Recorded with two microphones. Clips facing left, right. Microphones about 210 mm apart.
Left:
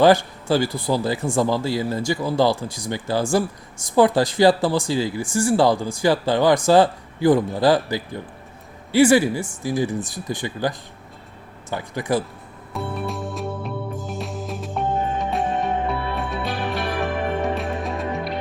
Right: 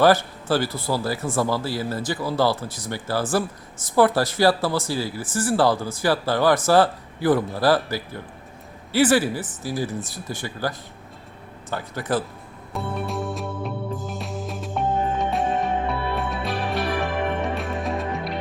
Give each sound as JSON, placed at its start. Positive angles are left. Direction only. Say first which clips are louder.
{"t": 0.0, "sound": "speech", "louder": "left 2 dB", "side_deg": 15}
{"t": 12.7, "sound": "music", "louder": "even", "side_deg": 0}